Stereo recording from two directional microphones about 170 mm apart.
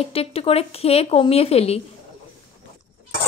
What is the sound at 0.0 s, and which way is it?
A woman's voice, 35° left (ahead or behind).